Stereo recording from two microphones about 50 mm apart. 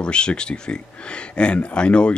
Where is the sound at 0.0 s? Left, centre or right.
Centre.